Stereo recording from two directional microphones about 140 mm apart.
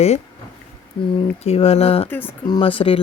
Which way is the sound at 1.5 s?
45° left (ahead or behind).